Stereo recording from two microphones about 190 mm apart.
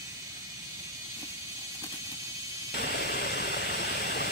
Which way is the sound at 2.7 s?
55° left (ahead or behind).